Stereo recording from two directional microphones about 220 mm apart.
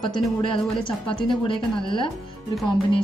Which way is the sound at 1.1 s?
20° left (ahead or behind).